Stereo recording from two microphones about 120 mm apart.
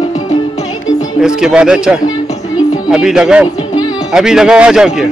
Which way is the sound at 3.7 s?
35° left (ahead or behind).